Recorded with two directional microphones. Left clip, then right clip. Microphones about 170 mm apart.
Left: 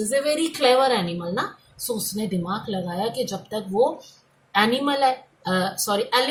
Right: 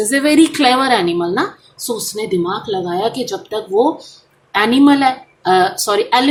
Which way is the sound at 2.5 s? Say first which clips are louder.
Right 9 dB; 35° right (ahead or behind).